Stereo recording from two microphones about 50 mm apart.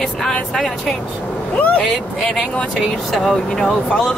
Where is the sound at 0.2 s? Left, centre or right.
Centre.